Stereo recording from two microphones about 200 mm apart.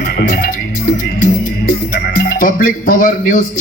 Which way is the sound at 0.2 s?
45° left (ahead or behind).